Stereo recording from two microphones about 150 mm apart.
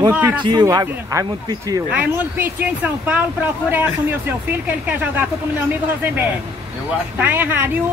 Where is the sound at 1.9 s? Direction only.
10° right (ahead or behind).